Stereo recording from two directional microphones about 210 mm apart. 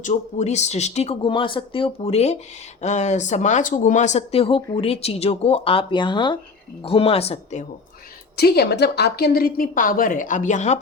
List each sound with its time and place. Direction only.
0.0 s speech: 35° left (ahead or behind)
8.4 s a woman's voice: 50° left (ahead or behind)